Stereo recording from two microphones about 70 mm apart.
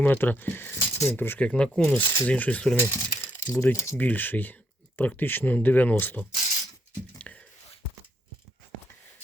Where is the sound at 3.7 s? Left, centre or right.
Left.